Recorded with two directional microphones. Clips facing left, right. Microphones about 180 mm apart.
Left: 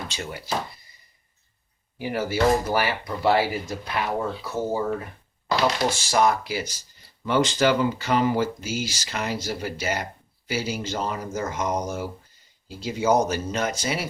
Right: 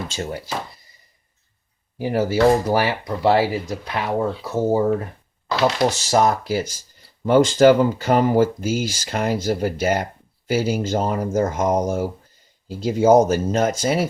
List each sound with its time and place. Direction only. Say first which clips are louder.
0.1 s speech: right 6 dB; 40° right (ahead or behind)
2.0 s speech: right 6 dB; 40° right (ahead or behind); by 4.9 s 20° right (ahead or behind)
5.9 s speech: right 3 dB; 40° right (ahead or behind)